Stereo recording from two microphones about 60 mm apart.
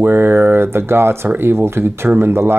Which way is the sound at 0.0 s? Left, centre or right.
Right.